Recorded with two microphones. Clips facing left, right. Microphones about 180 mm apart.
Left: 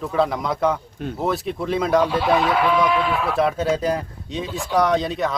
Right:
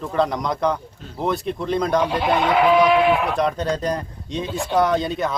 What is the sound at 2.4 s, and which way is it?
Speech, 20° right (ahead or behind).